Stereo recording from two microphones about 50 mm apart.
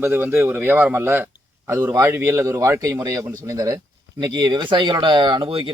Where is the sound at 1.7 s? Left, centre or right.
Right.